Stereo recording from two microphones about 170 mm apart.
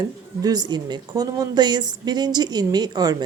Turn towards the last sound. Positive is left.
turn(degrees=-25)  # may be behind; listen again after turning